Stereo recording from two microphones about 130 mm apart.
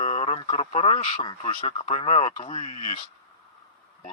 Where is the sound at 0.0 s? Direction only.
55° left (ahead or behind).